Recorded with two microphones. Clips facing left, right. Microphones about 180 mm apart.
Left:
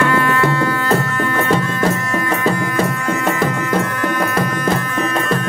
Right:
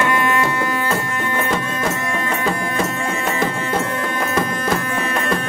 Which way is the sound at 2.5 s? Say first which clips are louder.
Left 3 dB; 25° right (ahead or behind).